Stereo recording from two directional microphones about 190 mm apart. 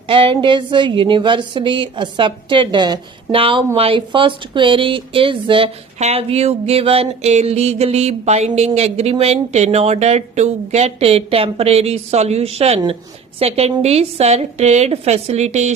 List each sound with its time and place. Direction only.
0.1 s speech: 25° right (ahead or behind)